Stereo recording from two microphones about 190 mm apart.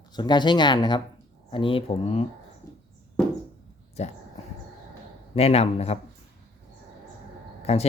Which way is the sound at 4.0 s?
35° left (ahead or behind).